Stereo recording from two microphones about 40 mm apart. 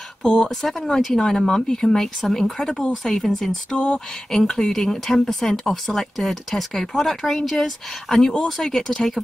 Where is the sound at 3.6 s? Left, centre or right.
Left.